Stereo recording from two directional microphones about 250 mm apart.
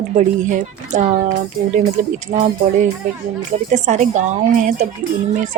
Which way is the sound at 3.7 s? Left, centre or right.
Right.